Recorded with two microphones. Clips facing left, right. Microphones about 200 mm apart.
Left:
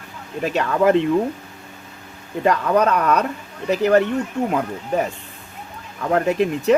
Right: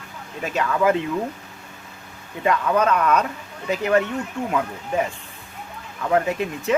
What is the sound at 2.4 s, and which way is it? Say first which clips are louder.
Speech: left 2 dB; 40° left (ahead or behind).